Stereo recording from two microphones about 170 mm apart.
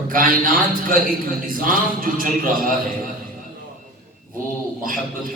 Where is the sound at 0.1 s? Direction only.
55° right (ahead or behind).